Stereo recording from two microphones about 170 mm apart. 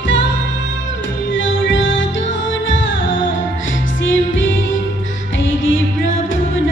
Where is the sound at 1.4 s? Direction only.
90° left.